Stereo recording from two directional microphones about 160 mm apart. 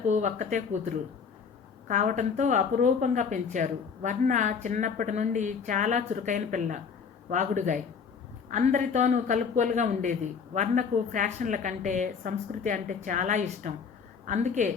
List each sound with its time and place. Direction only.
0.1 s a woman's voice: 50° right (ahead or behind)